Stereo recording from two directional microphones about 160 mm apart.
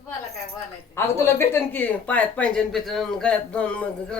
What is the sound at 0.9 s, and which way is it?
Speech, 15° left (ahead or behind).